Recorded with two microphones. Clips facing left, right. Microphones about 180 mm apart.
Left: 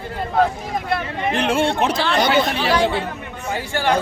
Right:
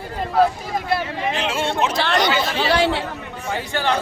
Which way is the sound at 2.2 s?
55° left (ahead or behind).